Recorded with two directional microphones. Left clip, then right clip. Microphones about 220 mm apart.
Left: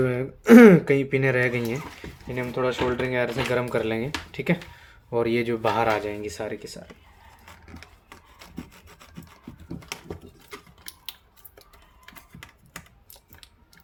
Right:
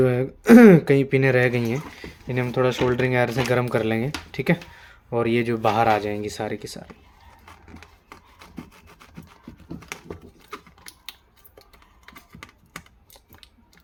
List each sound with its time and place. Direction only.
0.0 s speech: 25° right (ahead or behind)
8.1 s rub: centre (ahead or behind)
9.9 s typing: 5° left (ahead or behind)